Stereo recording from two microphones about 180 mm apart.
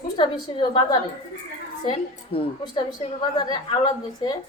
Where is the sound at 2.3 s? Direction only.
30° left (ahead or behind).